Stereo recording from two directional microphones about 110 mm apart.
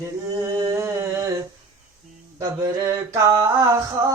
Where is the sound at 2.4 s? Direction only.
30° right (ahead or behind).